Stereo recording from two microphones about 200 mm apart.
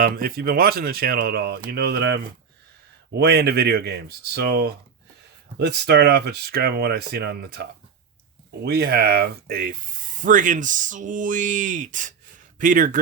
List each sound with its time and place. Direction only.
0.0 s speech: 50° right (ahead or behind)